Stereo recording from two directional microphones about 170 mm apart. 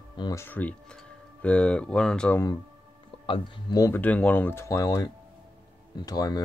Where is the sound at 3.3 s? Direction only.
25° left (ahead or behind).